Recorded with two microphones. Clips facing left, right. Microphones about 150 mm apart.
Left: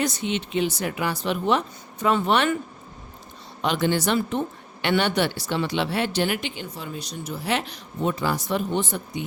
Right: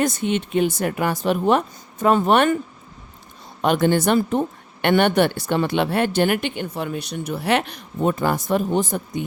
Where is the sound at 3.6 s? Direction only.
50° right (ahead or behind).